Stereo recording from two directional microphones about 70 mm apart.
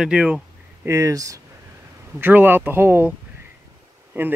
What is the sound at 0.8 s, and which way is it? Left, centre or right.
Speech, right.